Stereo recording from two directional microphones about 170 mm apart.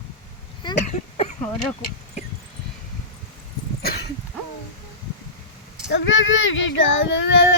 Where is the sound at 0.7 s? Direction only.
40° left (ahead or behind).